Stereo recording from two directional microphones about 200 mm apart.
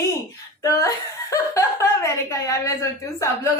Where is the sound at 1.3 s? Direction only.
15° left (ahead or behind).